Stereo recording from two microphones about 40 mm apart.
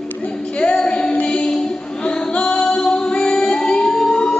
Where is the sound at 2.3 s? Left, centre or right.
Left.